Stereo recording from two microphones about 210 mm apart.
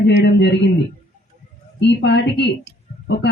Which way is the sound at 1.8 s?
55° left (ahead or behind).